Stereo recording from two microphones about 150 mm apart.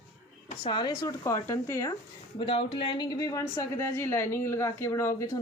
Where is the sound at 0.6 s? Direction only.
30° left (ahead or behind).